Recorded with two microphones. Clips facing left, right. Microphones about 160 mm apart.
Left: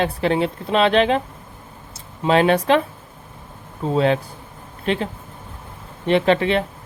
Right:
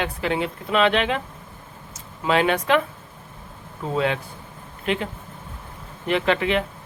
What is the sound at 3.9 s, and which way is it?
Speech, 35° left (ahead or behind).